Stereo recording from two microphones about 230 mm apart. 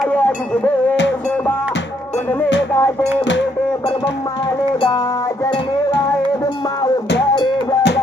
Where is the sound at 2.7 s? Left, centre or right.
Centre.